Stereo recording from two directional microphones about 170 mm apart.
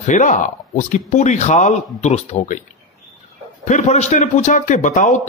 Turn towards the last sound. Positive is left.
turn(degrees=45)  # may be behind; listen again after turning